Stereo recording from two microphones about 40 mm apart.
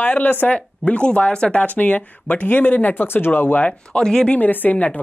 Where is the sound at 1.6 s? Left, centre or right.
Left.